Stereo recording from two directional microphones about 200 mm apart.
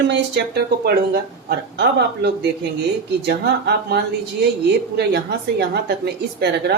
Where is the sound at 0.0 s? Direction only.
60° right (ahead or behind).